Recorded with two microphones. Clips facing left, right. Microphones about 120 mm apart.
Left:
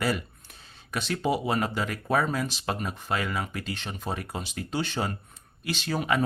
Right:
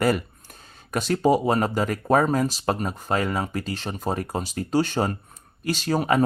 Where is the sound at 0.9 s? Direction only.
45° right (ahead or behind).